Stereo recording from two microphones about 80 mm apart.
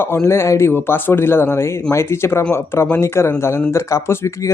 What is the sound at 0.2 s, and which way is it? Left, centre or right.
Speech, left.